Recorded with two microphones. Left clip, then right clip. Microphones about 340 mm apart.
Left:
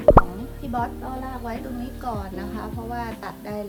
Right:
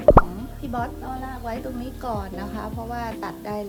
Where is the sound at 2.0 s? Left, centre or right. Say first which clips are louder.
Right 1 dB; centre.